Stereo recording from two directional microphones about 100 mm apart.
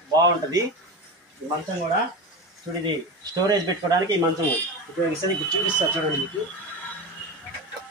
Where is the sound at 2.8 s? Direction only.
40° right (ahead or behind).